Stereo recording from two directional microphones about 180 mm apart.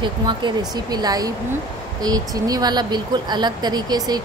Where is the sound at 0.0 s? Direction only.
25° right (ahead or behind).